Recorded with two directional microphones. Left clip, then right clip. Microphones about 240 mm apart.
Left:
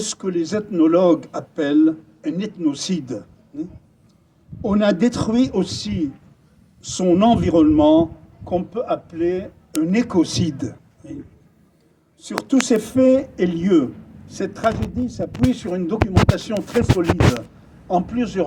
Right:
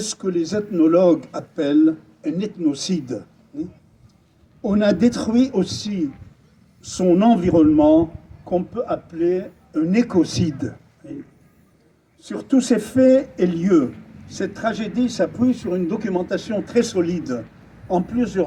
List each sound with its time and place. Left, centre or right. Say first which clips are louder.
0.0 s speech: even; right
12.2 s speech: left 1 dB; centre
15.6 s speech: even; centre
16.0 s speech: left 2 dB; right
17.9 s speech: even; right